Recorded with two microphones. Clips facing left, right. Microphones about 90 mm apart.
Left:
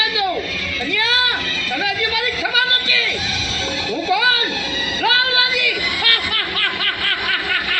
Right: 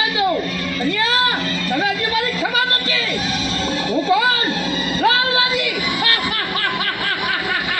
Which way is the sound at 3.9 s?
35° right (ahead or behind).